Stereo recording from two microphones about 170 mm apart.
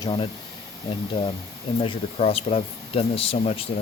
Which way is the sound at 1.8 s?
35° left (ahead or behind).